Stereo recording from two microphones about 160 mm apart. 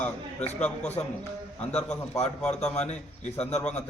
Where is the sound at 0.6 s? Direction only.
10° left (ahead or behind).